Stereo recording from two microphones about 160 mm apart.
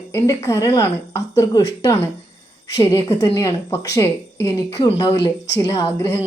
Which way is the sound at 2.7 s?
20° left (ahead or behind).